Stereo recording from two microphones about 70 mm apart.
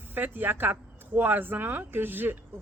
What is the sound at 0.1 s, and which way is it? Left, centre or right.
Speech, right.